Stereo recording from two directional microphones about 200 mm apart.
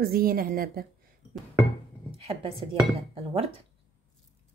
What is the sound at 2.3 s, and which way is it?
Speech, 25° right (ahead or behind).